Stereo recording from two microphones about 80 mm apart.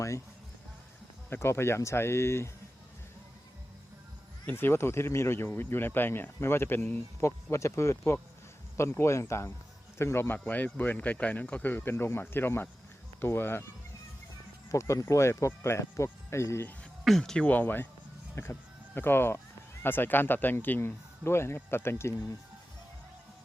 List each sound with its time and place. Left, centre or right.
1.3 s speech: left
4.4 s speech: left
14.7 s speech: left
17.0 s speech: centre
17.4 s speech: left
18.4 s speech: left